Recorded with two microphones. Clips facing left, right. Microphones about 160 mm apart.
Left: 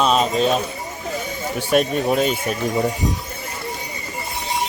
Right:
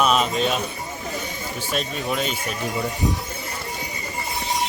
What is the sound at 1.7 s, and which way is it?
Speech, 50° left (ahead or behind).